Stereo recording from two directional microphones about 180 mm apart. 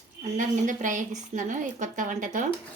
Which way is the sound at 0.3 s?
45° right (ahead or behind).